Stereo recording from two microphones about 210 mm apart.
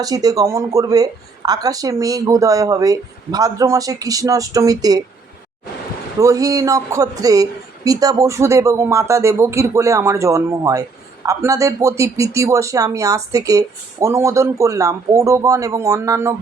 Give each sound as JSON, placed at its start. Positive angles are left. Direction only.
{"t": 0.0, "sound": "a woman's voice", "side_deg": -15}
{"t": 6.1, "sound": "a woman's voice", "side_deg": -15}